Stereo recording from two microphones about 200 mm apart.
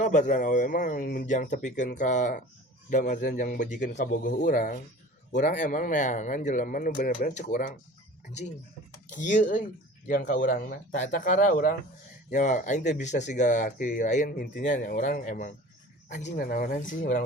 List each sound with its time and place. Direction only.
0.0 s a man's voice: 40° left (ahead or behind)